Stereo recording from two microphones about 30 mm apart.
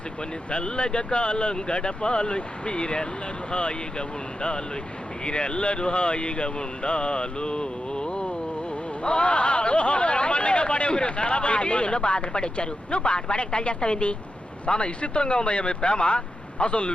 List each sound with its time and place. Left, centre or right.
0.5 s speech: left
5.2 s speech: left
9.0 s a sound: left
12.3 s speech: left